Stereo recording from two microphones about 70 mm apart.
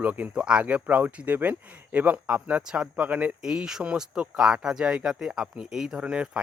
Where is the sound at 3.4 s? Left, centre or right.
Centre.